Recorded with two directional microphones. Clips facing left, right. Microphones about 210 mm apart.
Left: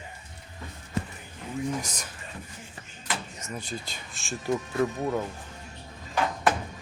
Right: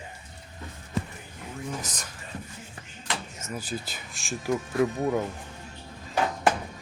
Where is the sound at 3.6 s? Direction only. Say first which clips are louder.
Right 3 dB; 5° right (ahead or behind).